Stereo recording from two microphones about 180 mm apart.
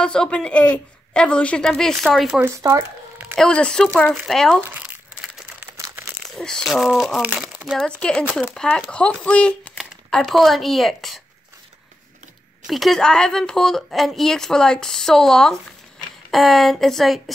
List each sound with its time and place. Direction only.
0.0 s a woman's voice: 5° left (ahead or behind)
2.6 s speech: 15° right (ahead or behind)
3.3 s a woman's voice: 5° left (ahead or behind)
4.6 s crumpling: 10° right (ahead or behind)
5.8 s crumpling: 15° right (ahead or behind)
6.3 s a woman's voice: centre (ahead or behind)
12.6 s a woman's voice: centre (ahead or behind)